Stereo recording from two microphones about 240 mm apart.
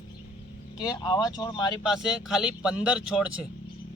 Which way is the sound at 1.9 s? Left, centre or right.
Centre.